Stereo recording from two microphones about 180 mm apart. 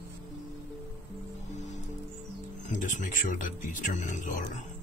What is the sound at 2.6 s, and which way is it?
Speech, 45° left (ahead or behind).